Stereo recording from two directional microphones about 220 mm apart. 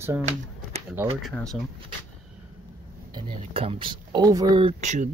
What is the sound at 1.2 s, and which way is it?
Speech, centre (ahead or behind).